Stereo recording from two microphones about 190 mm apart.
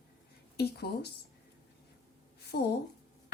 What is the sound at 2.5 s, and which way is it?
Speech, 60° left (ahead or behind).